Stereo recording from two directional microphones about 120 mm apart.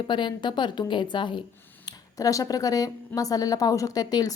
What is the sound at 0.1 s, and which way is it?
A woman's voice, 40° left (ahead or behind).